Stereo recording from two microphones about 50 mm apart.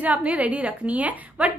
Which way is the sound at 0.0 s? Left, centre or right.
Right.